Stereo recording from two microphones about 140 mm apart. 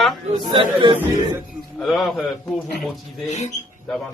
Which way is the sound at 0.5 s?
35° right (ahead or behind).